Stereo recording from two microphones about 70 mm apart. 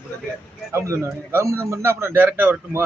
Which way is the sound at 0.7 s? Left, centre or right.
Right.